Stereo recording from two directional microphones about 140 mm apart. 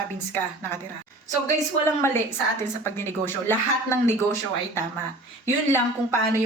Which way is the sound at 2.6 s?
15° left (ahead or behind).